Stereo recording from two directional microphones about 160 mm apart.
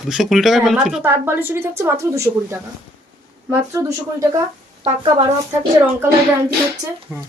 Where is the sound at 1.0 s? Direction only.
15° right (ahead or behind).